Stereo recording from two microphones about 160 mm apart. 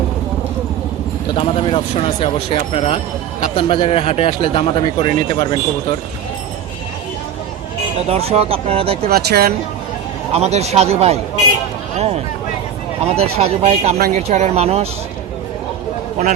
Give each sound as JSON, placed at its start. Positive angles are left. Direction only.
{"t": 1.3, "sound": "speech", "side_deg": 35}
{"t": 8.0, "sound": "speech", "side_deg": -40}
{"t": 9.0, "sound": "speech", "side_deg": -75}
{"t": 10.3, "sound": "speech", "side_deg": -40}
{"t": 13.1, "sound": "speech", "side_deg": -40}